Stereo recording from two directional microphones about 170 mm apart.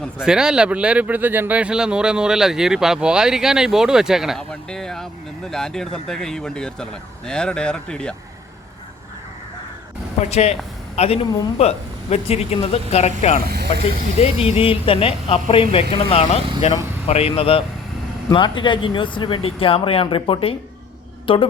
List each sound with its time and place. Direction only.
0.0 s speech: 5° right (ahead or behind)
10.2 s speech: 40° left (ahead or behind)
13.4 s speech: 70° right (ahead or behind)
14.2 s speech: 35° left (ahead or behind)